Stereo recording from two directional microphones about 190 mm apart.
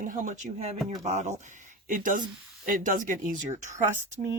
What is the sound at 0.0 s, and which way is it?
Speech, 45° right (ahead or behind).